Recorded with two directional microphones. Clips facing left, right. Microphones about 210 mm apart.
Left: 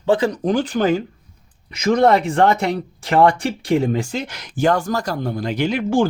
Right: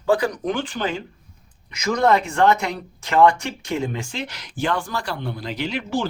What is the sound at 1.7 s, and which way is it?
Speech, 30° left (ahead or behind).